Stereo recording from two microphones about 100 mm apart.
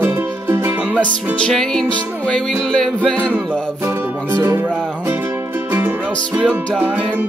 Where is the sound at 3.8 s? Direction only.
25° right (ahead or behind).